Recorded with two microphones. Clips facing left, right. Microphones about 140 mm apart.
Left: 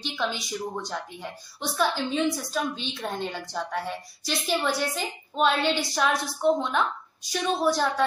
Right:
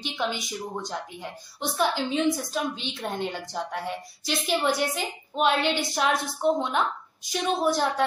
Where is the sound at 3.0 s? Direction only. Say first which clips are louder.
Right 2 dB; 15° right (ahead or behind).